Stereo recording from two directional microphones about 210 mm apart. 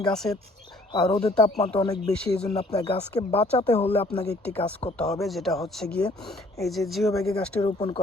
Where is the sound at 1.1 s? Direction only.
25° left (ahead or behind).